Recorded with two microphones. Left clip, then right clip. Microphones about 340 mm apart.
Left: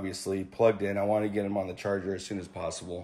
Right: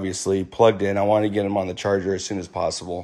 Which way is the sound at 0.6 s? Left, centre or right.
Right.